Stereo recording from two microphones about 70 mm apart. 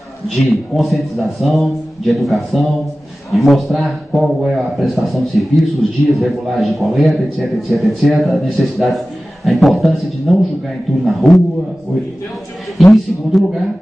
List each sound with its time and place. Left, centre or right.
0.4 s a man's voice: centre
12.7 s a man's voice: centre